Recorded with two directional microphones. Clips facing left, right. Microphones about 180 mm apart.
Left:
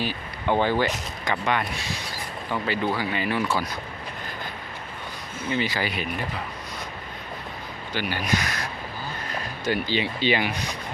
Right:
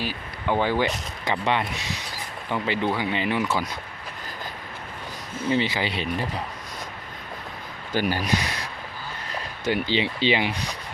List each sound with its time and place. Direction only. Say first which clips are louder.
0.0 s a sound: left 1 dB; 5° right (ahead or behind)
0.6 s speech: even; 10° right (ahead or behind)
1.2 s speech: right 1 dB; 25° right (ahead or behind)
5.5 s speech: right 2 dB; 25° right (ahead or behind)
7.9 s speech: right 5 dB; 40° right (ahead or behind)
9.6 s speech: right 1 dB; 20° right (ahead or behind)